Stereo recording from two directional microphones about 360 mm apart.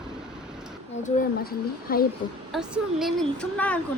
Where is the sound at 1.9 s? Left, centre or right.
Left.